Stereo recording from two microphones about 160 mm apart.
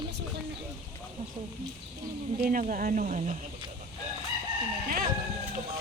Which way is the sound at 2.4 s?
55° right (ahead or behind).